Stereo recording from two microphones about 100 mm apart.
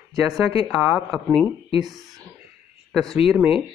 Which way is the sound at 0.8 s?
10° right (ahead or behind).